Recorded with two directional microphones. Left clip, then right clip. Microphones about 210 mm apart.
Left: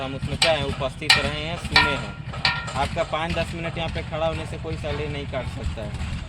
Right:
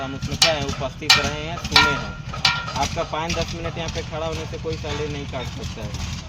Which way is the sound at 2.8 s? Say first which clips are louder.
Even; 55° left (ahead or behind).